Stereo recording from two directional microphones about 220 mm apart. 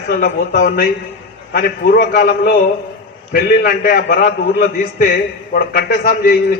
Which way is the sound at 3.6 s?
45° left (ahead or behind).